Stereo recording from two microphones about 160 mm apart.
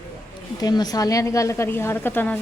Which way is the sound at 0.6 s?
25° left (ahead or behind).